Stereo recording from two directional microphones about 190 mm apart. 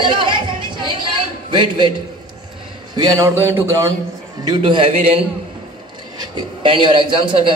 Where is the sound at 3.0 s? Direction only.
15° right (ahead or behind).